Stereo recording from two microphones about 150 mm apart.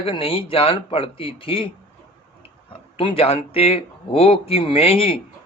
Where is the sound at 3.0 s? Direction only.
40° left (ahead or behind).